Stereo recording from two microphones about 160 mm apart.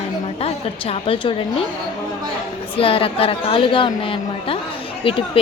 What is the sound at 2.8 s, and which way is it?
A woman's voice, 35° left (ahead or behind).